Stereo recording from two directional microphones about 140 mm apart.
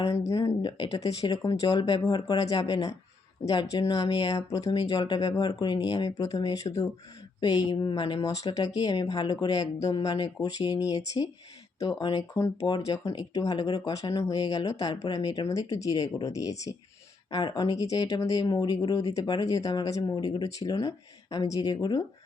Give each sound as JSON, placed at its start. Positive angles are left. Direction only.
{"t": 0.2, "sound": "speech", "side_deg": 20}
{"t": 11.8, "sound": "speech", "side_deg": 25}